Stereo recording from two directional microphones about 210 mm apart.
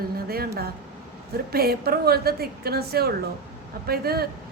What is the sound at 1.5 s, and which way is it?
A woman's voice, 45° right (ahead or behind).